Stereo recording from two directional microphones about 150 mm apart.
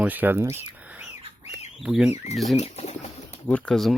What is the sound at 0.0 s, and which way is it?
Speech, 10° right (ahead or behind).